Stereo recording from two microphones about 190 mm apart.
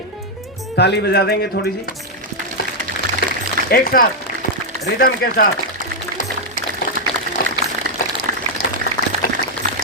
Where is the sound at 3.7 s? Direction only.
50° left (ahead or behind).